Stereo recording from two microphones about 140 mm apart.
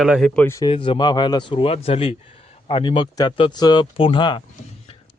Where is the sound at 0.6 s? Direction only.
35° left (ahead or behind).